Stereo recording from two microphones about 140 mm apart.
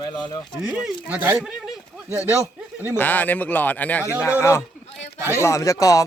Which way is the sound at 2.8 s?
15° left (ahead or behind).